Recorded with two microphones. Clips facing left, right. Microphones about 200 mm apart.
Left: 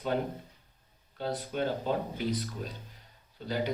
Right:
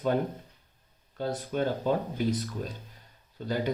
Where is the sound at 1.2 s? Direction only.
45° right (ahead or behind).